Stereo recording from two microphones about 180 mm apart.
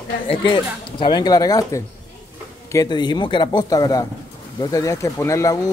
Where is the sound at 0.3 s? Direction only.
25° left (ahead or behind).